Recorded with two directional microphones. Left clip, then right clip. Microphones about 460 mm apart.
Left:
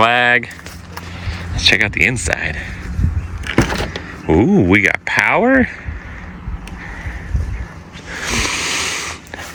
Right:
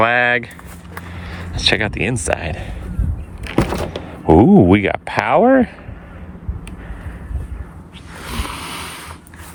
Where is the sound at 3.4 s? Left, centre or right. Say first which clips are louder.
Left 2 dB; right.